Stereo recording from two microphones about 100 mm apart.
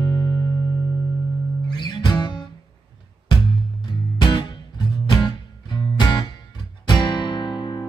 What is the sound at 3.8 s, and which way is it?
Music, 45° left (ahead or behind).